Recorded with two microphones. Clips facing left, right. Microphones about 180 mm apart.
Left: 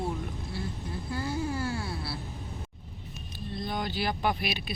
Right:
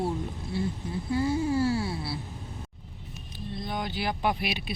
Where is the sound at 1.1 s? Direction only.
25° right (ahead or behind).